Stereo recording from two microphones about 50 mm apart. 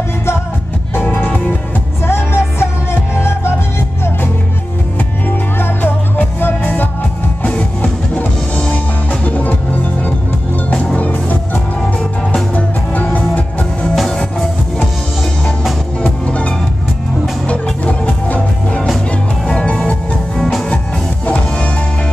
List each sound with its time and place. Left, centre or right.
2.0 s music: left
5.6 s music: left
8.2 s drum kit: left
9.2 s music: left
11.0 s music: left
16.0 s music: left
18.0 s music: left